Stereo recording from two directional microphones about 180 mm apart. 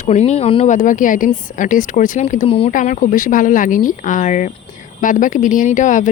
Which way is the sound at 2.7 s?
45° left (ahead or behind).